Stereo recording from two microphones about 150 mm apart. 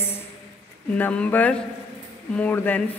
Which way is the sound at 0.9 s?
10° left (ahead or behind).